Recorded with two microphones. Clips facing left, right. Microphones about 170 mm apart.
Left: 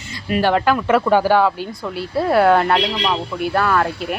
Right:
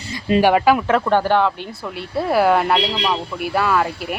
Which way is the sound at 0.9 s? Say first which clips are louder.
Left 2 dB; 5° left (ahead or behind).